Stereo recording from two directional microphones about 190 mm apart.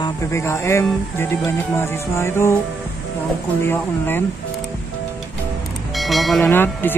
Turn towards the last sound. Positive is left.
turn(degrees=10)  # may be behind; listen again after turning